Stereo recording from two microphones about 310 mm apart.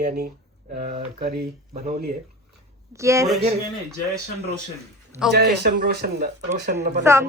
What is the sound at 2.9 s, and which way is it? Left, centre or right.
Speech, centre.